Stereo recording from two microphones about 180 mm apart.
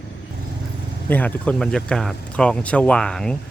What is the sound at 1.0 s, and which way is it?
Speech, 10° left (ahead or behind).